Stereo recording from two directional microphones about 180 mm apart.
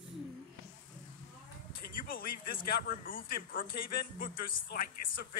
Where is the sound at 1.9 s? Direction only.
55° left (ahead or behind).